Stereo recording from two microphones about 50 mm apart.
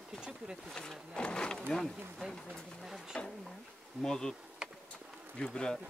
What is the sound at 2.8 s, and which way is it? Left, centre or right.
Speech, centre.